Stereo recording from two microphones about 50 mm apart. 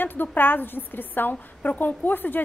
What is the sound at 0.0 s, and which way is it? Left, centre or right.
A woman's voice, left.